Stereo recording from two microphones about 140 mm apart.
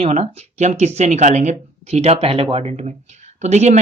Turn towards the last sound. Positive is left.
turn(degrees=-55)  # may be behind; listen again after turning